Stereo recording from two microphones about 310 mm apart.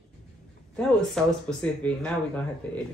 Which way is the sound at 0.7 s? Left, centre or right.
Centre.